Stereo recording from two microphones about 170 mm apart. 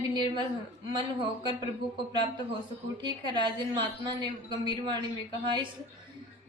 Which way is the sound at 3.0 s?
25° right (ahead or behind).